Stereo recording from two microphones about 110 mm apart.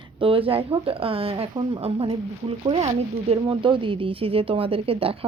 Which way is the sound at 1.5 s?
45° right (ahead or behind).